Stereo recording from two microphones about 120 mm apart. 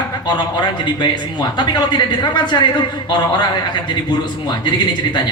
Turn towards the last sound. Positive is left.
turn(degrees=40)  # may be behind; listen again after turning